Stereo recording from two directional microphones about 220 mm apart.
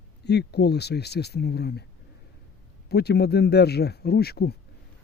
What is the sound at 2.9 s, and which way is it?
Speech, 45° left (ahead or behind).